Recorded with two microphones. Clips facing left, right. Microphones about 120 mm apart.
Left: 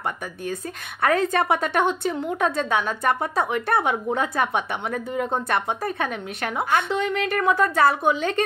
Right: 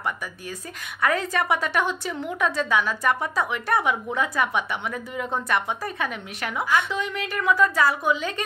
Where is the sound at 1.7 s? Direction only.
55° left (ahead or behind).